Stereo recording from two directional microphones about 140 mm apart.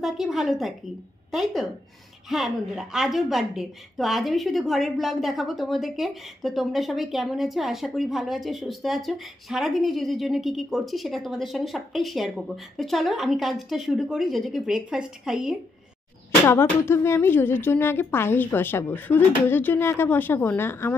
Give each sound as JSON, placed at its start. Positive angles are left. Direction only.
{"t": 0.0, "sound": "a woman's voice", "side_deg": 0}
{"t": 16.4, "sound": "a woman's voice", "side_deg": 15}